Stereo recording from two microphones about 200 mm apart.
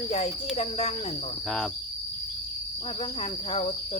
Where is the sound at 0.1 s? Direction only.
30° left (ahead or behind).